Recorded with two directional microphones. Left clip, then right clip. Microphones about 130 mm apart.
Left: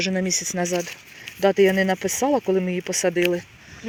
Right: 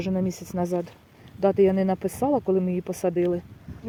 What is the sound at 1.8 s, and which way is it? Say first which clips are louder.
Speech: left 4 dB; 15° right (ahead or behind).